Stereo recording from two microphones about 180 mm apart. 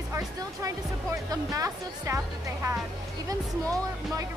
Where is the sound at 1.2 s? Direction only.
20° right (ahead or behind).